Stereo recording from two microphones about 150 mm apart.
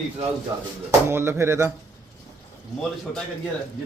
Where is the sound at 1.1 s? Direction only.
15° right (ahead or behind).